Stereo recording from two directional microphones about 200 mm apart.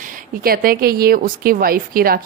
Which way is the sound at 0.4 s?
45° right (ahead or behind).